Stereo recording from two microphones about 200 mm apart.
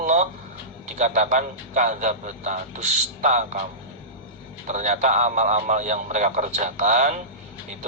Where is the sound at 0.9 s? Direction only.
40° right (ahead or behind).